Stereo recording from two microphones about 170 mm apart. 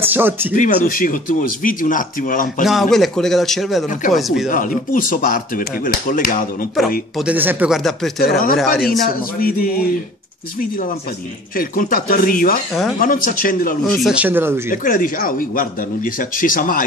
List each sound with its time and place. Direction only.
0.0 s speech: 10° right (ahead or behind)
0.6 s speech: 55° left (ahead or behind)
2.6 s speech: centre (ahead or behind)
4.5 s speech: 50° left (ahead or behind)
7.2 s speech: 10° right (ahead or behind)
9.4 s speech: 60° left (ahead or behind)
11.5 s speech: 55° left (ahead or behind)
13.9 s speech: 5° right (ahead or behind)
14.7 s speech: 55° left (ahead or behind)